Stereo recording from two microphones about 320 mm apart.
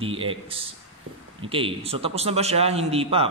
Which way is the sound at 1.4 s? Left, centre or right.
Centre.